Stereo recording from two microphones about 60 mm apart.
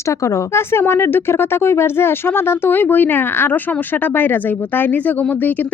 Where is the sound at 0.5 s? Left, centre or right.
Left.